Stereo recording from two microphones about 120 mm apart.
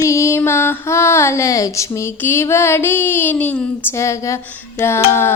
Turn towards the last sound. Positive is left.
turn(degrees=20)  # may be behind; listen again after turning